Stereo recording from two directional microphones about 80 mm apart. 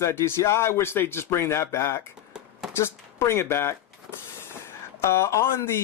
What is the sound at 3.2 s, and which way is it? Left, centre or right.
Speech, left.